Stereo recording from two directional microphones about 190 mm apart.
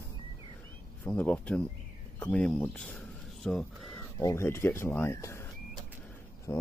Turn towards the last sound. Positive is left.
turn(degrees=15)  # may be behind; listen again after turning